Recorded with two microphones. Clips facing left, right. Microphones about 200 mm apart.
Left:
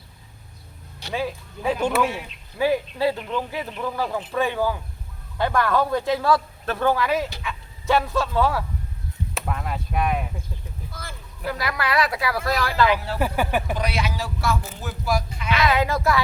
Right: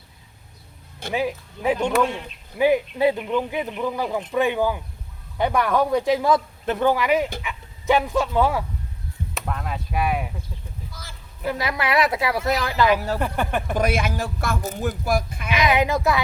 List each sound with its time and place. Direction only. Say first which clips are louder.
1.1 s speech: right 2 dB; 15° right (ahead or behind)
1.8 s speech: left 1 dB; 5° left (ahead or behind)
2.6 s speech: right 3 dB; 20° right (ahead or behind)
9.3 s speech: even; centre (ahead or behind)
10.9 s speech: left 4 dB; 55° left (ahead or behind)
11.4 s a woman's voice: right 2 dB; 20° right (ahead or behind)
13.1 s speech: left 1 dB; 5° left (ahead or behind)
13.7 s speech: right 4 dB; 50° right (ahead or behind)
15.4 s speech: right 1 dB; 15° right (ahead or behind)